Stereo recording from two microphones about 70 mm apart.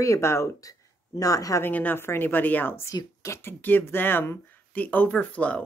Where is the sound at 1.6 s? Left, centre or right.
Left.